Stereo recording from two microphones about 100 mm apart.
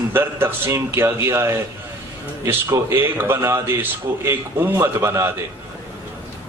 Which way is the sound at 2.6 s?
30° right (ahead or behind).